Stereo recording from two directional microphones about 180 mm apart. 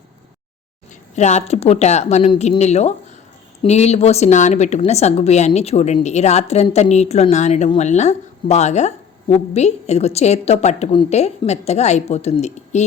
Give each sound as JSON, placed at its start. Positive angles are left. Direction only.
{"t": 1.1, "sound": "a woman's voice", "side_deg": 40}